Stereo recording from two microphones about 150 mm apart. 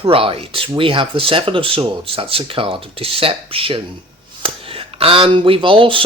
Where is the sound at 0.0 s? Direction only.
40° right (ahead or behind).